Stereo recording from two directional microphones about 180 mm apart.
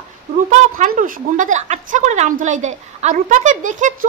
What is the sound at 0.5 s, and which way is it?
A woman's voice, 45° right (ahead or behind).